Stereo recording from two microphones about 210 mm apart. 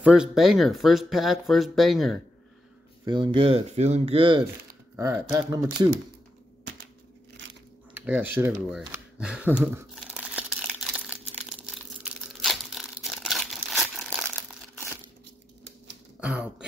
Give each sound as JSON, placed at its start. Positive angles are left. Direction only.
{"t": 0.0, "sound": "speech", "side_deg": -5}
{"t": 3.1, "sound": "speech", "side_deg": -20}
{"t": 4.9, "sound": "speech", "side_deg": -15}
{"t": 7.9, "sound": "a sound", "side_deg": -10}
{"t": 11.7, "sound": "crumpling", "side_deg": 0}
{"t": 16.2, "sound": "speech", "side_deg": -5}